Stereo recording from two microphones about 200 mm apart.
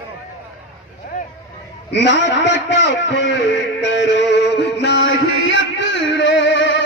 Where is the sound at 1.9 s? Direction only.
60° left (ahead or behind).